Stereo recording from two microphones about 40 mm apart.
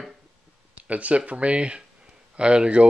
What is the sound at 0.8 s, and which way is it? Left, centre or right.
Speech, right.